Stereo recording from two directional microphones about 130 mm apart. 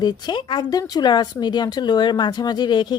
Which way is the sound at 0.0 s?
35° left (ahead or behind).